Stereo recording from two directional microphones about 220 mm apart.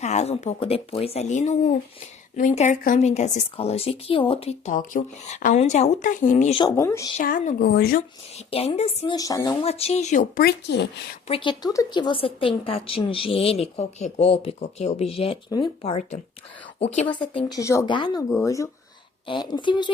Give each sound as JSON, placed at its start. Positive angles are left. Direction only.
{"t": 0.0, "sound": "a woman's voice", "side_deg": 30}
{"t": 6.7, "sound": "speech", "side_deg": 15}
{"t": 7.2, "sound": "a woman's voice", "side_deg": 35}
{"t": 8.4, "sound": "a woman's voice", "side_deg": 25}
{"t": 9.1, "sound": "a woman's voice", "side_deg": 15}
{"t": 10.4, "sound": "speech", "side_deg": 50}
{"t": 11.3, "sound": "a woman's voice", "side_deg": 20}